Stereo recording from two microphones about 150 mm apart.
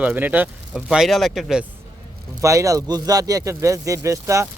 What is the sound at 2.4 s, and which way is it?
Speech, 20° right (ahead or behind).